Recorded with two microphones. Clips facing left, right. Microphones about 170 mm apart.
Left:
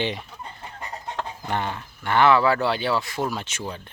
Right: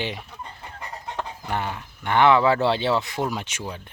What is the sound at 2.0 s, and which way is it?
Speech, 20° right (ahead or behind).